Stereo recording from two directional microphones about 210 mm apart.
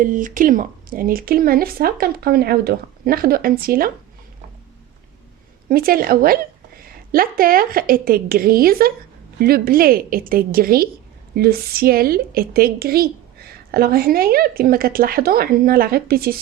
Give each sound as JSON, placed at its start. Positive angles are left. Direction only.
{"t": 0.0, "sound": "a woman's voice", "side_deg": -40}
{"t": 5.6, "sound": "a woman's voice", "side_deg": -45}